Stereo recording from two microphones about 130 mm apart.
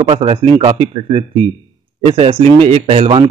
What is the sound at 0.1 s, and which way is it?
Speech, 45° right (ahead or behind).